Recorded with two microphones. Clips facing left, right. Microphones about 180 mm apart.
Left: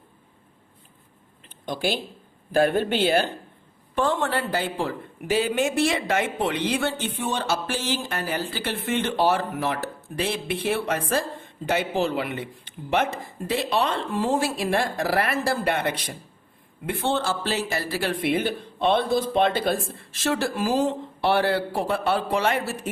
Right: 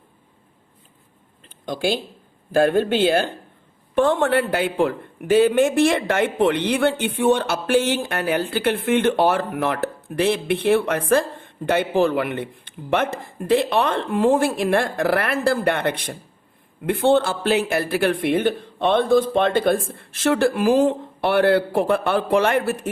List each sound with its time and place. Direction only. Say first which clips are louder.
1.6 s speech: right 4 dB; 50° right (ahead or behind)
3.9 s a man's voice: right 6 dB; 60° right (ahead or behind)